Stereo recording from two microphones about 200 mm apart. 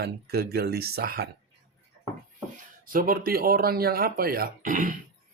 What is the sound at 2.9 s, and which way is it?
Speech, 45° right (ahead or behind).